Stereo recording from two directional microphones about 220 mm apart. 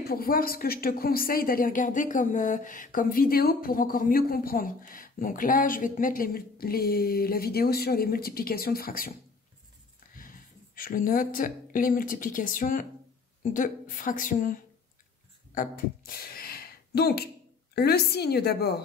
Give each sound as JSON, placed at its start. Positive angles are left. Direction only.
{"t": 0.0, "sound": "a woman's voice", "side_deg": 45}
{"t": 10.1, "sound": "a woman's voice", "side_deg": 40}